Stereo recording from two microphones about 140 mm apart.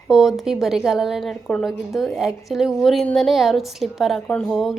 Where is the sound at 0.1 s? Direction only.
Centre (ahead or behind).